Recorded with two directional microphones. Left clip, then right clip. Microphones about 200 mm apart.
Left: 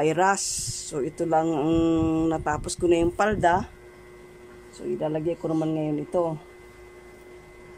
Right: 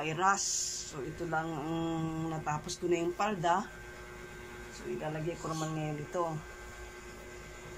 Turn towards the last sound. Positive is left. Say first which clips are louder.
# left 10 dB
turn(degrees=40)  # may be behind; listen again after turning